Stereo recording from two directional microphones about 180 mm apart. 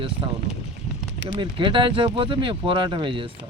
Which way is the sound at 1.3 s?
25° right (ahead or behind).